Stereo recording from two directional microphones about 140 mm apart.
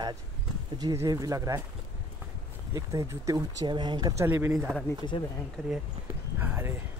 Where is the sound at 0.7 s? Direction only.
25° right (ahead or behind).